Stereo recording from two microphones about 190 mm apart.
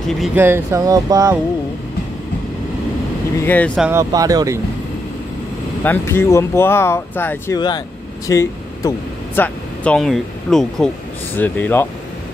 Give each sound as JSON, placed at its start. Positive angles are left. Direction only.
{"t": 0.2, "sound": "speech", "side_deg": -10}
{"t": 3.4, "sound": "speech", "side_deg": 5}
{"t": 3.8, "sound": "speech", "side_deg": -15}
{"t": 5.9, "sound": "speech", "side_deg": 15}